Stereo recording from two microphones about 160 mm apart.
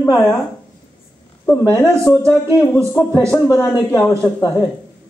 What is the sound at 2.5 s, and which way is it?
Speech, 15° left (ahead or behind).